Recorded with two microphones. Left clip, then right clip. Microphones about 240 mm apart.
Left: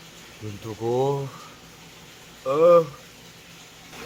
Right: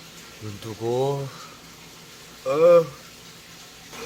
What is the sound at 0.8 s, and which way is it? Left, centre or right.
Speech, centre.